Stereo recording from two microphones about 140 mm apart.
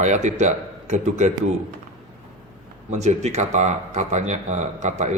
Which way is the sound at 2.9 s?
55° right (ahead or behind).